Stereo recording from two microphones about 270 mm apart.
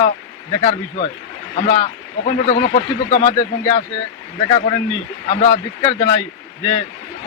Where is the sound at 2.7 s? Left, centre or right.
Left.